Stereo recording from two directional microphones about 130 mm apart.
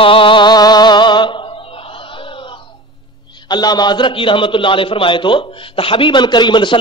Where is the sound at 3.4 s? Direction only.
30° left (ahead or behind).